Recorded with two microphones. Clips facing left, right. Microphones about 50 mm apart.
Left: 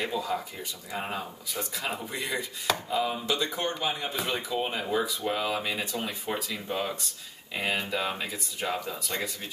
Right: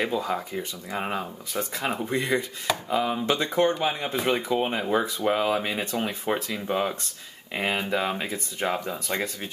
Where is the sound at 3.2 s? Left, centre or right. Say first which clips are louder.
Right 7 dB; right.